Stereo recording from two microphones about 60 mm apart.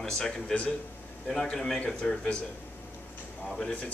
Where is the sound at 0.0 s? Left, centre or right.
Centre.